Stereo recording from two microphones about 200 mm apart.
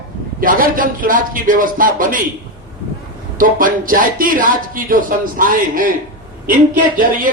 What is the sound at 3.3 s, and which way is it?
Speech, 45° right (ahead or behind).